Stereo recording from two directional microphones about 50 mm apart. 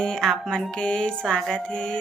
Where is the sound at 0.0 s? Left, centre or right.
Centre.